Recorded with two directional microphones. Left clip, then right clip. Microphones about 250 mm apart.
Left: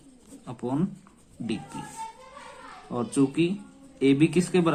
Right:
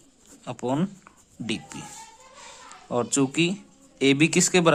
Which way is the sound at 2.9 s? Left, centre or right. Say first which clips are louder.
Right 2 dB; right.